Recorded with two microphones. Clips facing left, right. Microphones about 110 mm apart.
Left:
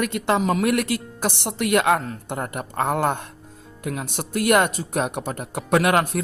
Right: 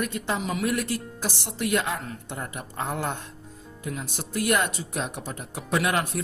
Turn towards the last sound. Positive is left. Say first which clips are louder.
# left 6 dB
turn(degrees=55)  # may be behind; listen again after turning